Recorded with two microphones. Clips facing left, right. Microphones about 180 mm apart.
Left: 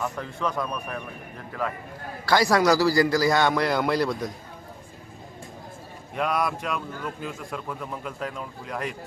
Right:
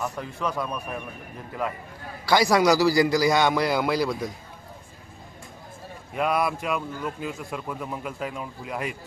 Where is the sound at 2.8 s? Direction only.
20° right (ahead or behind).